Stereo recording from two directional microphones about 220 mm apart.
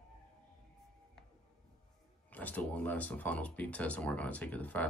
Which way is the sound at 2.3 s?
5° left (ahead or behind).